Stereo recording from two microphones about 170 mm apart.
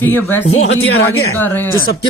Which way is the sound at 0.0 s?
10° left (ahead or behind).